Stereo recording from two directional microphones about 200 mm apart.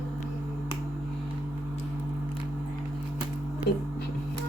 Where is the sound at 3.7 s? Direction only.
55° left (ahead or behind).